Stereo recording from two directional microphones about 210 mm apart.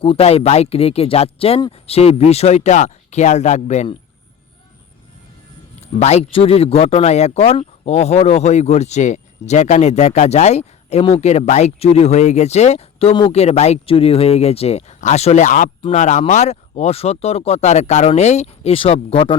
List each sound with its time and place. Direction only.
0.0 s speech: 25° left (ahead or behind)
6.0 s speech: 30° left (ahead or behind)